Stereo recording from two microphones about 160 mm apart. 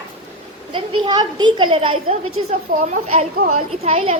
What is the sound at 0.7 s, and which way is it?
Speech, 30° right (ahead or behind).